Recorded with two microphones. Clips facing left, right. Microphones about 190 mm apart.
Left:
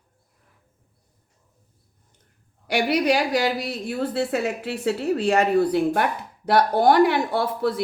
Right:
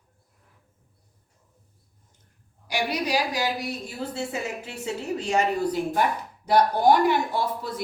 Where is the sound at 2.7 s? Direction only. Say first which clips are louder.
Left 6 dB; 65° left (ahead or behind).